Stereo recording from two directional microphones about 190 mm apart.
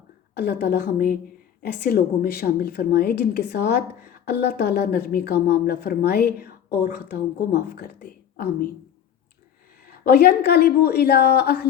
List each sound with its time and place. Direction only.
0.3 s a woman's voice: 60° left (ahead or behind)
10.1 s a woman's voice: 60° left (ahead or behind)